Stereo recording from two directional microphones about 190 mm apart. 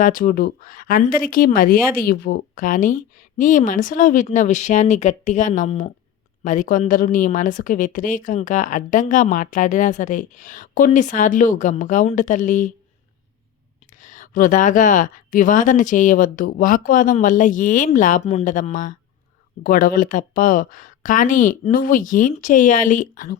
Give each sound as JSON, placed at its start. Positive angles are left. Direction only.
{"t": 0.0, "sound": "speech", "side_deg": 45}
{"t": 14.0, "sound": "speech", "side_deg": 40}